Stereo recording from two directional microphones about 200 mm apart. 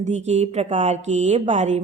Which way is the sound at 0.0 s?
35° right (ahead or behind).